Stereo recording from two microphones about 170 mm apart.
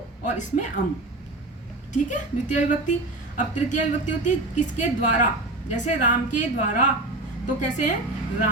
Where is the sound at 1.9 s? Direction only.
45° left (ahead or behind).